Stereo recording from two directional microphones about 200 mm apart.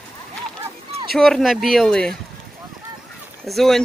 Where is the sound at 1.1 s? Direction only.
Centre (ahead or behind).